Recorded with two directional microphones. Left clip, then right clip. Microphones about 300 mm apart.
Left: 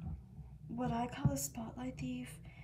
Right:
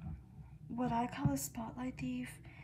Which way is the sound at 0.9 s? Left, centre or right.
Right.